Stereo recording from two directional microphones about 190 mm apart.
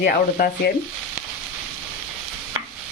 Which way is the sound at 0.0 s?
50° left (ahead or behind).